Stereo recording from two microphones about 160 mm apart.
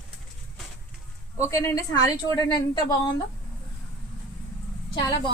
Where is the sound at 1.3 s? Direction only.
15° left (ahead or behind).